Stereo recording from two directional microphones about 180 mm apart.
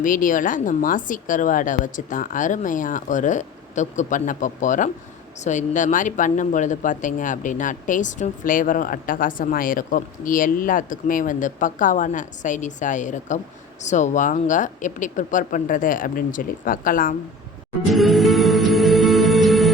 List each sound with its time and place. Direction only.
0.0 s speech: 50° left (ahead or behind)
17.8 s music: centre (ahead or behind)